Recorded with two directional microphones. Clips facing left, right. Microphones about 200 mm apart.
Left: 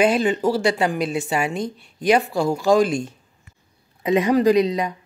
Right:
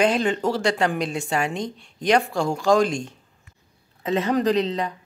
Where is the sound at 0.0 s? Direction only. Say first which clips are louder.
Left 3 dB; 5° left (ahead or behind).